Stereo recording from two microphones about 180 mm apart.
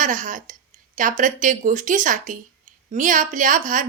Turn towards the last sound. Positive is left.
turn(degrees=-45)  # may be behind; listen again after turning